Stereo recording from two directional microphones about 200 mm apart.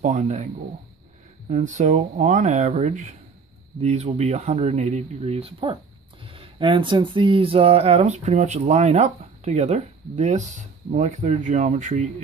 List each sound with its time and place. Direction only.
0.0 s speech: 35° right (ahead or behind)
1.5 s speech: 40° right (ahead or behind)